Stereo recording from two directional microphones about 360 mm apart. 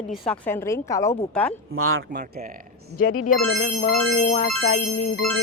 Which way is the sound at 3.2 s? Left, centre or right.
Left.